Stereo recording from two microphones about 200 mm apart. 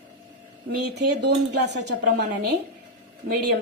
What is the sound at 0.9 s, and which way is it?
A woman's voice, 55° right (ahead or behind).